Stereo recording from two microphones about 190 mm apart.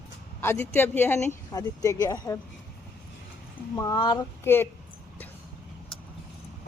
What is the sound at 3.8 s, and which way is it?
Speech, 20° left (ahead or behind).